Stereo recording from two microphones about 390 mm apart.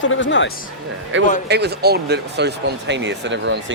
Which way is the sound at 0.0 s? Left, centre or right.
Left.